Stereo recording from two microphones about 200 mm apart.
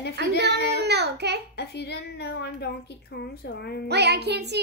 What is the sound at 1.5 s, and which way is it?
A woman's voice, 55° left (ahead or behind).